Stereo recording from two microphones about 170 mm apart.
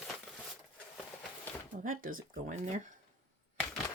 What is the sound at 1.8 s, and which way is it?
Speech, 55° right (ahead or behind).